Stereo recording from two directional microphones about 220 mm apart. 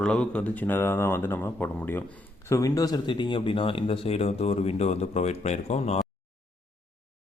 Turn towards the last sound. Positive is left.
turn(degrees=30)  # may be behind; listen again after turning